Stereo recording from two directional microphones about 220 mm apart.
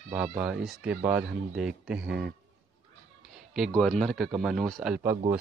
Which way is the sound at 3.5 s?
Centre (ahead or behind).